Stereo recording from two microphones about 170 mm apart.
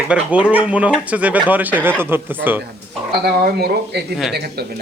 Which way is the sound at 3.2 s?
70° right (ahead or behind).